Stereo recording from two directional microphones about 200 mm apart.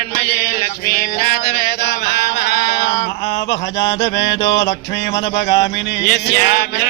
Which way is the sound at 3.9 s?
60° left (ahead or behind).